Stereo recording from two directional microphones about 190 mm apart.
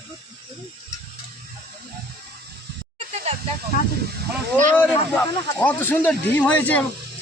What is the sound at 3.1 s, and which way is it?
Snake, 35° right (ahead or behind).